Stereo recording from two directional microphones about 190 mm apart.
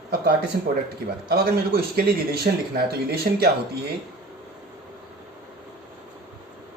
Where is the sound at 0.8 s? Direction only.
55° right (ahead or behind).